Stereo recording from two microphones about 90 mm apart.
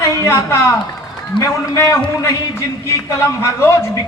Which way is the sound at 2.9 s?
35° left (ahead or behind).